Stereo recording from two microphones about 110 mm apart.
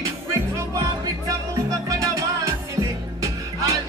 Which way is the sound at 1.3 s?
30° right (ahead or behind).